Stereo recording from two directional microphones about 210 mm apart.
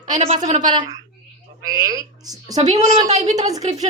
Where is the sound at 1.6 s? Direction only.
40° right (ahead or behind).